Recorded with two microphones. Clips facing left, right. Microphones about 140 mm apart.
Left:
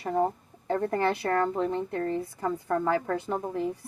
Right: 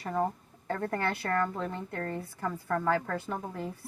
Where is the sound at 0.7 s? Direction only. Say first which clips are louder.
Left 5 dB; 20° left (ahead or behind).